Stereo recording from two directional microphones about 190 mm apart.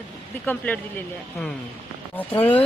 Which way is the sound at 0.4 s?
10° left (ahead or behind).